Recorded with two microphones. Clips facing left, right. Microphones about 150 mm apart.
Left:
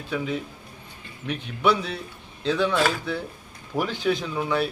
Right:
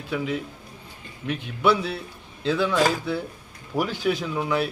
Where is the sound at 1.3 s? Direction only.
5° right (ahead or behind).